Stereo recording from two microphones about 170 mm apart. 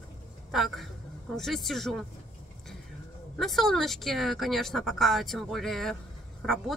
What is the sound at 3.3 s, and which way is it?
Speech, centre (ahead or behind).